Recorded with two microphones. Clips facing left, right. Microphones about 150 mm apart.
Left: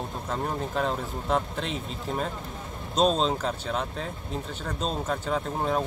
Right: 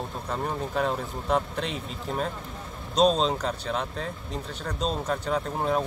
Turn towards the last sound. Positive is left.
turn(degrees=0)  # may be behind; listen again after turning